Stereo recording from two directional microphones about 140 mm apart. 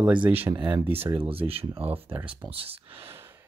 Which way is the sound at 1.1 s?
40° right (ahead or behind).